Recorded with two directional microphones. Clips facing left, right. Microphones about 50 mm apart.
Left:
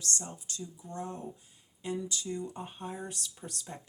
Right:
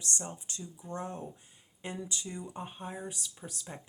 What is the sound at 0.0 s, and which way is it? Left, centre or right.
Speech, right.